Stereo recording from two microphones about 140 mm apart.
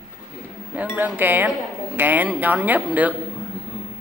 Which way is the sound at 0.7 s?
10° right (ahead or behind).